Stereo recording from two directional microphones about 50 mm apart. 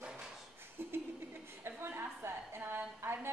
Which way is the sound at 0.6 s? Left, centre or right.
Right.